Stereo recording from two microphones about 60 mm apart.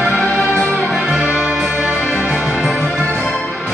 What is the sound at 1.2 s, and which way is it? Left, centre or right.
Music, centre.